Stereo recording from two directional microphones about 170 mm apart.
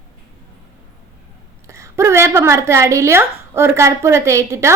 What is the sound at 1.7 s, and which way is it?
A woman's voice, 15° right (ahead or behind).